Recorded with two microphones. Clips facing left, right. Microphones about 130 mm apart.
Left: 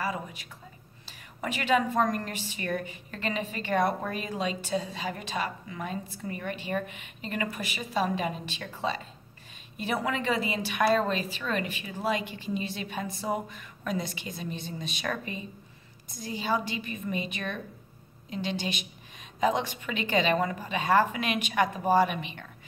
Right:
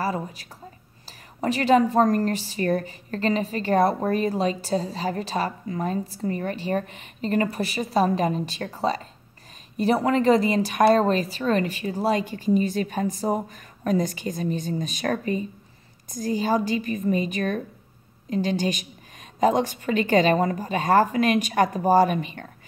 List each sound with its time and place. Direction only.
0.0 s a woman's voice: 40° right (ahead or behind)